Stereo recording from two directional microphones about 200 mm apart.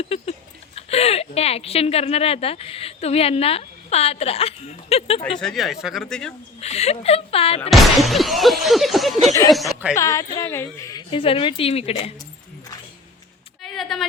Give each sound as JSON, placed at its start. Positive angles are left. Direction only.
{"t": 0.0, "sound": "a sound", "side_deg": 30}
{"t": 0.8, "sound": "a woman's voice", "side_deg": 30}
{"t": 5.4, "sound": "music", "side_deg": 0}
{"t": 6.6, "sound": "a woman's voice", "side_deg": 30}
{"t": 7.7, "sound": "music", "side_deg": 0}
{"t": 9.9, "sound": "a woman's voice", "side_deg": 15}
{"t": 13.6, "sound": "a sound", "side_deg": 0}